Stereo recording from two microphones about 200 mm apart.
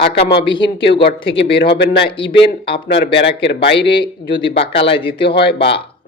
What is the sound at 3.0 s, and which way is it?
Speech, 60° left (ahead or behind).